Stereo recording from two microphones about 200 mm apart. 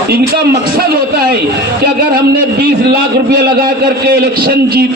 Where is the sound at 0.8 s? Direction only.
50° right (ahead or behind).